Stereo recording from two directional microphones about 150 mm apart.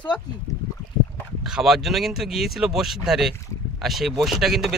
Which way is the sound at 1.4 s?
5° right (ahead or behind).